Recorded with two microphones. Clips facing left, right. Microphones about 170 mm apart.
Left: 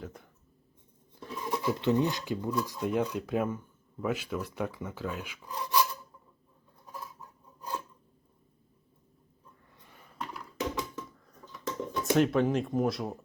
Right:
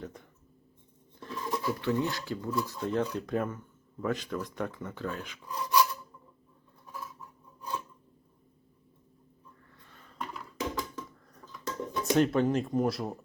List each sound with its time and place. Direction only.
0.0 s speech: centre (ahead or behind)
1.2 s a sound: 10° left (ahead or behind)
1.6 s speech: 20° left (ahead or behind)
5.5 s filing: 20° left (ahead or behind)
9.8 s a sound: 10° left (ahead or behind)
10.8 s cutlery: centre (ahead or behind)